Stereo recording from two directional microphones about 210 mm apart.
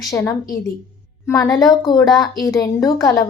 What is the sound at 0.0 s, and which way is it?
A woman's voice, 15° left (ahead or behind).